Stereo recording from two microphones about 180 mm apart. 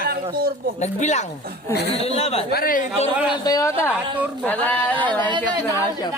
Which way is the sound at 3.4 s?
20° left (ahead or behind).